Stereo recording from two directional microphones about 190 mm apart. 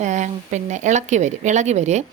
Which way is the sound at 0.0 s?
40° right (ahead or behind).